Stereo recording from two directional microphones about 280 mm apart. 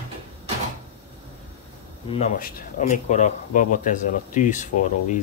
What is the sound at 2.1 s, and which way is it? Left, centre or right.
Speech, left.